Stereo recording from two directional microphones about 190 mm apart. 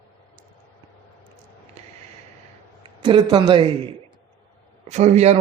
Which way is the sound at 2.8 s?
25° right (ahead or behind).